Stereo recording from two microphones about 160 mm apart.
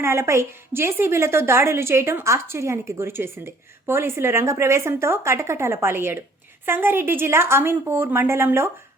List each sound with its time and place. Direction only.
0.0 s a woman's voice: 15° right (ahead or behind)